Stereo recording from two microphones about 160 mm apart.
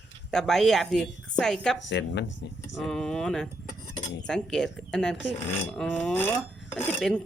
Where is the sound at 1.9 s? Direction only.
90° left.